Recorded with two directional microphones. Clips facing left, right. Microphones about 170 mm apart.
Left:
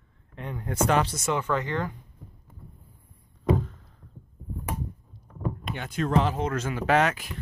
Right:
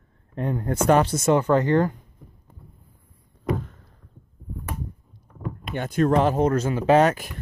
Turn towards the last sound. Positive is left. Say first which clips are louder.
# right 6 dB
turn(degrees=-40)  # may be behind; listen again after turning